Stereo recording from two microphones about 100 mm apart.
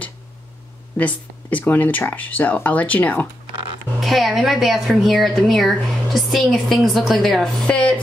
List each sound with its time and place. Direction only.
0.9 s speech: 15° left (ahead or behind)
4.0 s a woman's voice: centre (ahead or behind)
7.6 s speech: 10° left (ahead or behind)